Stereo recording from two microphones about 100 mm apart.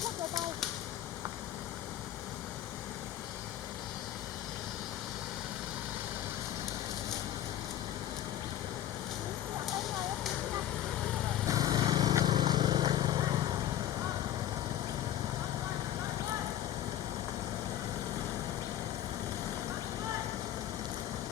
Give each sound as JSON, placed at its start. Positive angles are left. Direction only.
{"t": 11.4, "sound": "vehicle", "side_deg": -40}